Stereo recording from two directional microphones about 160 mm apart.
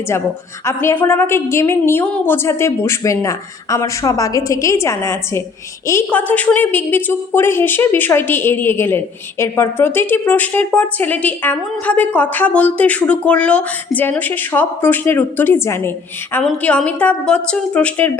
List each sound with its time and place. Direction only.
0.6 s a woman's voice: 15° left (ahead or behind)